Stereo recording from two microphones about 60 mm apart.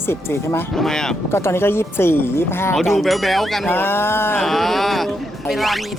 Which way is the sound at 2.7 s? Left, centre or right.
Centre.